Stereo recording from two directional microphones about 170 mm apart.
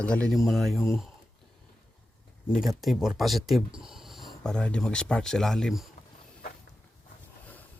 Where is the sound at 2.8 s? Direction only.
Centre (ahead or behind).